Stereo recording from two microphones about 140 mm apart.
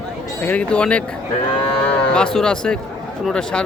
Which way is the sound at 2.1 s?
5° left (ahead or behind).